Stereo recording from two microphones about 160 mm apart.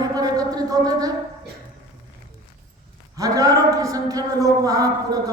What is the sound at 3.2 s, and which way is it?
A man's voice, 20° right (ahead or behind).